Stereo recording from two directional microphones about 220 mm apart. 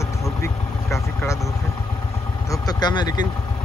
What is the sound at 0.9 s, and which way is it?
Speech, 15° left (ahead or behind).